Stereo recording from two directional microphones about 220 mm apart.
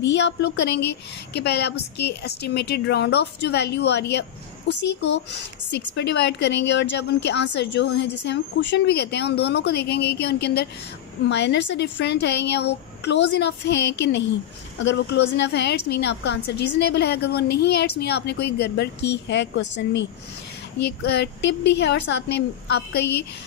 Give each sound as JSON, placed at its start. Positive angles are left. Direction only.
{"t": 0.0, "sound": "a woman's voice", "side_deg": 55}
{"t": 21.0, "sound": "a woman's voice", "side_deg": 50}